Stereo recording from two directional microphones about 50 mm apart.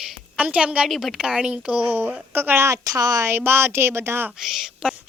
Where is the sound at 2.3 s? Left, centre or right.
Right.